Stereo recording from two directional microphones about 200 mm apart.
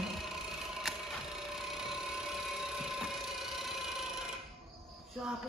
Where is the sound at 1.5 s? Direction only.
Centre (ahead or behind).